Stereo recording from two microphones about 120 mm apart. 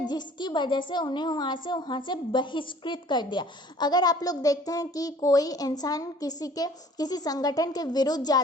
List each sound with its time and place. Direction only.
0.1 s a woman's voice: 40° left (ahead or behind)